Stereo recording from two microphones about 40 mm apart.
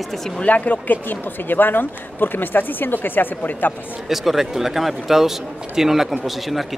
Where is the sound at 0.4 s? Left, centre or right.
Left.